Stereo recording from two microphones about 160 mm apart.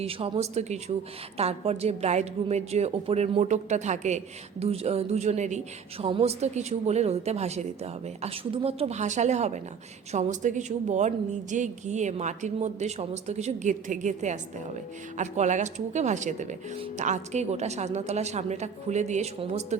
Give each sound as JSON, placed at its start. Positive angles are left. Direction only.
{"t": 0.0, "sound": "a woman's voice", "side_deg": -40}